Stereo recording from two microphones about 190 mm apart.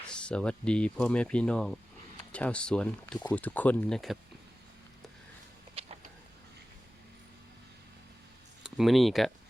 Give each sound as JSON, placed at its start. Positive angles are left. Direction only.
{"t": 0.1, "sound": "speech", "side_deg": 5}
{"t": 5.8, "sound": "a sound", "side_deg": -30}
{"t": 8.6, "sound": "speech", "side_deg": 0}